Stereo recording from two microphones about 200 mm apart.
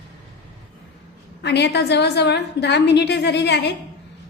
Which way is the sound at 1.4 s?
60° left (ahead or behind).